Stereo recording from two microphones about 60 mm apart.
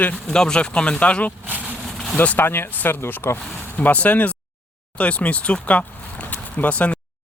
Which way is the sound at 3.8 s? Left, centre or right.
Left.